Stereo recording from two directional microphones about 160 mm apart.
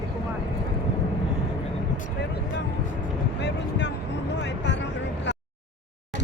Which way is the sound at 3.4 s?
90° left.